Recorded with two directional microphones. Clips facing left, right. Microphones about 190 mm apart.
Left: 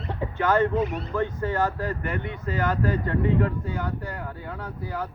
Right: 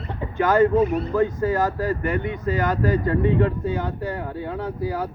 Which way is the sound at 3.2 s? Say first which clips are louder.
Right 4 dB; 25° right (ahead or behind).